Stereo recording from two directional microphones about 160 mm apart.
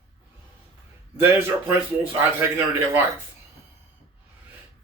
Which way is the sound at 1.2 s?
10° right (ahead or behind).